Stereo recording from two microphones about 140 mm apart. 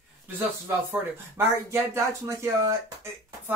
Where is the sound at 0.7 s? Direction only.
15° right (ahead or behind).